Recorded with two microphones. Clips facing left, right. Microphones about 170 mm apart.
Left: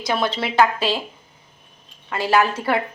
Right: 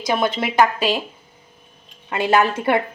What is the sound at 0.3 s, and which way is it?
Speech, 15° right (ahead or behind).